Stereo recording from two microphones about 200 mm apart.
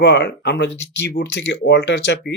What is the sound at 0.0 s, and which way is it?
A man's voice, 60° left (ahead or behind).